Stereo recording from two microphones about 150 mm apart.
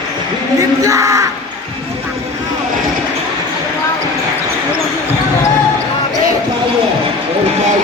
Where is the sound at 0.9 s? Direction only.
20° right (ahead or behind).